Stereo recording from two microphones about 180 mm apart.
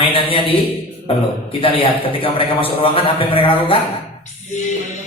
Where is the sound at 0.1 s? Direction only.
30° left (ahead or behind).